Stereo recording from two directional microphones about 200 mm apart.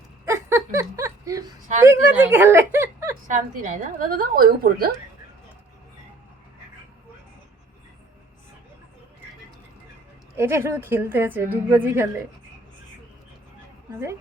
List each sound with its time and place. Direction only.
0.3 s a sound: 15° right (ahead or behind)
1.8 s a woman's voice: 10° right (ahead or behind)
3.3 s a woman's voice: 40° right (ahead or behind)
10.3 s a woman's voice: 15° right (ahead or behind)